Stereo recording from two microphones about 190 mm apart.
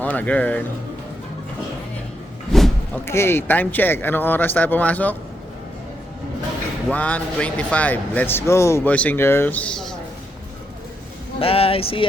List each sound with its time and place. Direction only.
0.0 s speech: 10° left (ahead or behind)
2.5 s vehicle: centre (ahead or behind)
3.1 s speech: 15° left (ahead or behind)
6.8 s speech: 5° left (ahead or behind)
11.3 s speech: 30° left (ahead or behind)